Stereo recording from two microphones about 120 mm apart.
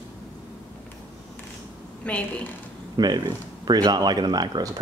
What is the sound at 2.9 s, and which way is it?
Speech, 35° right (ahead or behind).